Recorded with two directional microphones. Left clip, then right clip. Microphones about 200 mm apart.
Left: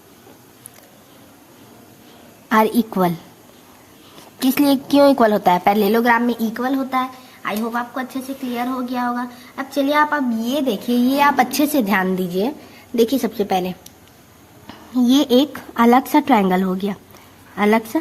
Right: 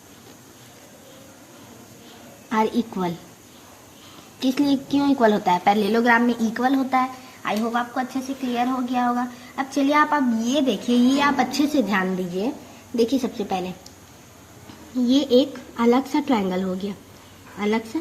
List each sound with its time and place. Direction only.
2.5 s a woman's voice: 40° left (ahead or behind)
4.4 s a woman's voice: 45° left (ahead or behind)
15.1 s a woman's voice: 45° left (ahead or behind)